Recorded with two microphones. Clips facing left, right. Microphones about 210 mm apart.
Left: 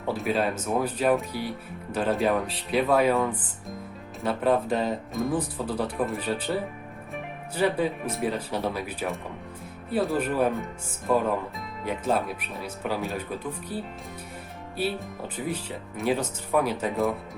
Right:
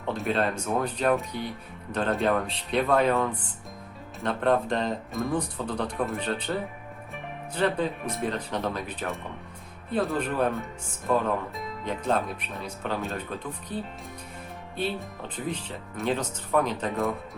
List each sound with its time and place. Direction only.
0.0 s speech: 5° left (ahead or behind)